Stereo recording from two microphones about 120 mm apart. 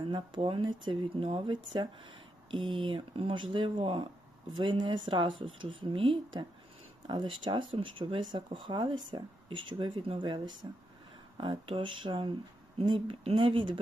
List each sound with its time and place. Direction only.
0.1 s speech: 40° right (ahead or behind)
11.3 s speech: 50° right (ahead or behind)